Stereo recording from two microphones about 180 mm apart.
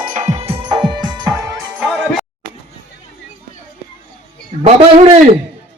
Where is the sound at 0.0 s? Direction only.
45° right (ahead or behind); by 1.3 s 25° right (ahead or behind).